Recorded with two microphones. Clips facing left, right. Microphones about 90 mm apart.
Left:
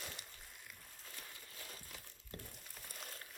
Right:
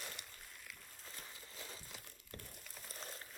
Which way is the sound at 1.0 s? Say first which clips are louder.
Right 1 dB; 25° right (ahead or behind).